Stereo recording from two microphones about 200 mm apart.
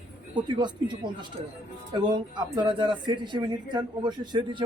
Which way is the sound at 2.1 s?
20° right (ahead or behind).